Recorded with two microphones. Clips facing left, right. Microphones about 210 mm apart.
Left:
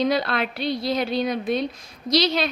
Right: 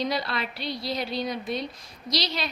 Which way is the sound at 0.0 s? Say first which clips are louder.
Left 6 dB; 55° left (ahead or behind).